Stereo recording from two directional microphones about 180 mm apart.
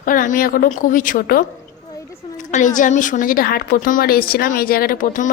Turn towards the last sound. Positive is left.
turn(degrees=45)  # may be behind; listen again after turning